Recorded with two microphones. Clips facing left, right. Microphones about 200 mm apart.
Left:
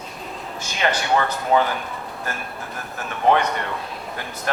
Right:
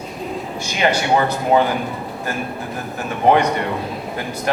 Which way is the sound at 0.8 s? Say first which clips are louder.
Right 4 dB; 20° right (ahead or behind).